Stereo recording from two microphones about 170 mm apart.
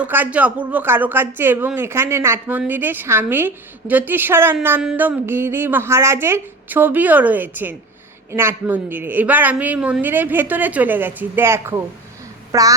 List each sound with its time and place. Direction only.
0.0 s a woman's voice: 10° right (ahead or behind)